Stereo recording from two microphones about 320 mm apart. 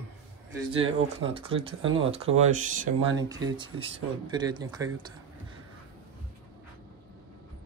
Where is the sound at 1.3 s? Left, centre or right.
Centre.